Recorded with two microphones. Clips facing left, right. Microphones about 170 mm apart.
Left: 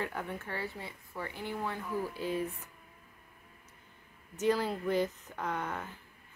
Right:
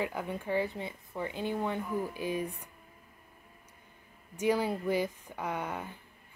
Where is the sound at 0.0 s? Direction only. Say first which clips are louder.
Right 3 dB; 15° right (ahead or behind).